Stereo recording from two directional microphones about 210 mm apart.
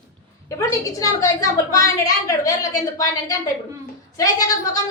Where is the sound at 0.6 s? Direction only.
15° left (ahead or behind).